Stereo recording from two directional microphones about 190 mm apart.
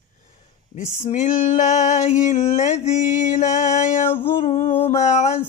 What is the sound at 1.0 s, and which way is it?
Female singing, 35° left (ahead or behind).